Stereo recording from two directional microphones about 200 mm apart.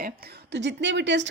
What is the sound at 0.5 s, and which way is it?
Speech, 60° right (ahead or behind).